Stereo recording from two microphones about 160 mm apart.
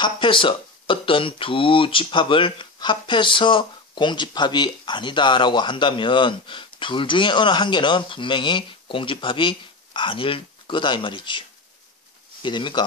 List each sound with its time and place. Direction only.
0.0 s speech: 30° left (ahead or behind)